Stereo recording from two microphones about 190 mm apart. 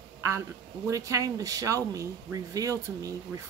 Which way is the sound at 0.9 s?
15° right (ahead or behind).